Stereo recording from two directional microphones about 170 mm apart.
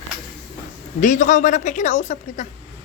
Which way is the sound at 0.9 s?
50° left (ahead or behind).